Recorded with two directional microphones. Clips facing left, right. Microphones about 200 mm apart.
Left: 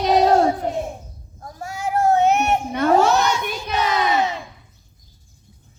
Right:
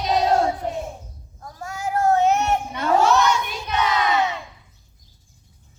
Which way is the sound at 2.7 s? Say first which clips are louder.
Left 6 dB; 60° left (ahead or behind).